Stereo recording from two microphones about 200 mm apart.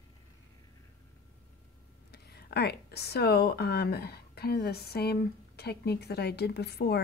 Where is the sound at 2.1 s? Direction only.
55° left (ahead or behind).